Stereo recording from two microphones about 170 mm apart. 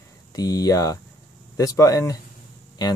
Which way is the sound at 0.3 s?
20° left (ahead or behind).